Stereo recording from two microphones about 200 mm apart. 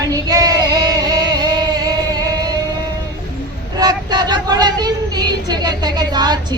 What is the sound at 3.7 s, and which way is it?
Speech, 20° right (ahead or behind).